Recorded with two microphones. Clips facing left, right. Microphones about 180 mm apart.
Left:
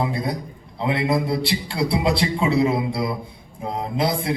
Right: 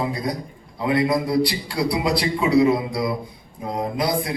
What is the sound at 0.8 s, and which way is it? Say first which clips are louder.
A man's voice: right 1 dB; 25° left (ahead or behind).